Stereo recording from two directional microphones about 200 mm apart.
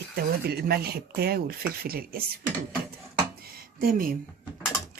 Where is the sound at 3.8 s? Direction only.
45° right (ahead or behind).